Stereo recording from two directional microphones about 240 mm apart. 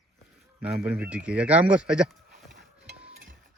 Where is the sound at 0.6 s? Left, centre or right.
Centre.